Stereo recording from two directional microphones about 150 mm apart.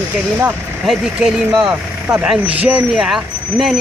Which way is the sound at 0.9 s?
5° right (ahead or behind).